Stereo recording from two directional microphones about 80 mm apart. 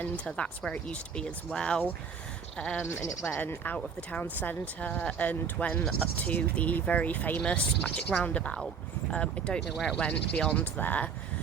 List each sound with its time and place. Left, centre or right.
0.0 s speech: centre
2.8 s speech: left
3.2 s speech: left; by 9.9 s centre
10.0 s speech: centre